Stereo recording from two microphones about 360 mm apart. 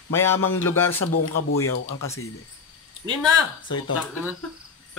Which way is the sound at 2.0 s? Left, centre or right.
Centre.